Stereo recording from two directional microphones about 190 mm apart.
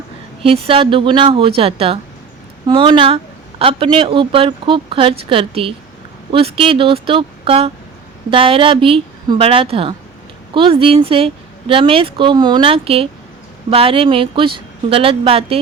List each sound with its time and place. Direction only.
0.4 s a woman's voice: 30° right (ahead or behind)